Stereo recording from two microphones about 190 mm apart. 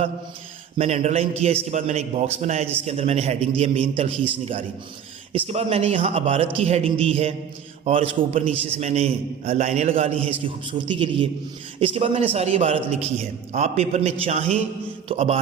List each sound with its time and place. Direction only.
0.8 s a man's voice: 35° right (ahead or behind)
5.3 s a man's voice: 30° right (ahead or behind)